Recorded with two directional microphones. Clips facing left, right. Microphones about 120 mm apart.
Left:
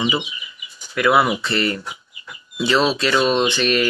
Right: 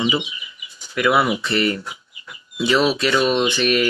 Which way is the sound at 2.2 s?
10° right (ahead or behind).